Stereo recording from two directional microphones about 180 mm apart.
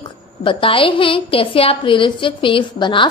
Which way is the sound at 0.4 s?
30° left (ahead or behind).